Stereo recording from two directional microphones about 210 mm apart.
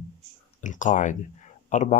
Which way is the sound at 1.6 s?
35° left (ahead or behind).